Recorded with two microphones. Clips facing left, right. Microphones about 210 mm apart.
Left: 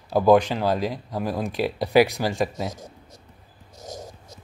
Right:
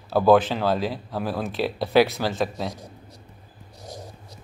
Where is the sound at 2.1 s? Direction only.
10° left (ahead or behind).